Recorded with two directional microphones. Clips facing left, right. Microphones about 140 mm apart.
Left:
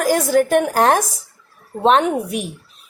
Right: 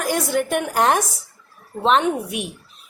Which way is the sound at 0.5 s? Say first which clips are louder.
Left 4 dB; 35° left (ahead or behind).